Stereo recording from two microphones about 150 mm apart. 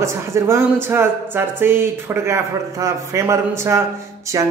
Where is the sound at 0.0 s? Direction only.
20° right (ahead or behind).